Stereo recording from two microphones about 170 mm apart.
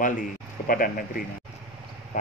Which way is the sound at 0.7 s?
55° left (ahead or behind).